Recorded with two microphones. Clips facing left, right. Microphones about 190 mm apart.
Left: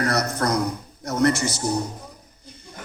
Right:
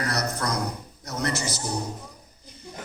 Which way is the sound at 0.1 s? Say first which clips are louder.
Left 5 dB; 55° left (ahead or behind).